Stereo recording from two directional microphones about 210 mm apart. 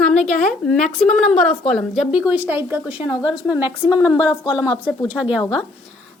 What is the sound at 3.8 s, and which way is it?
A woman's voice, 5° right (ahead or behind).